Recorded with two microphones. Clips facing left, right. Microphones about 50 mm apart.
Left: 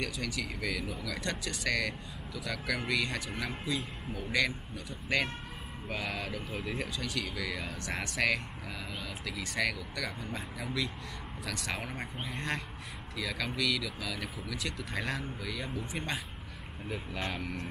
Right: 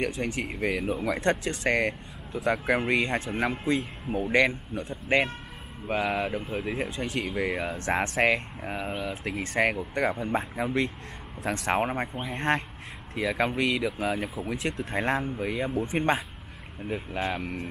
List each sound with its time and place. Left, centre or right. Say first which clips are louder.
0.0 s speech: right 7 dB; right
16.9 s speech: right 7 dB; right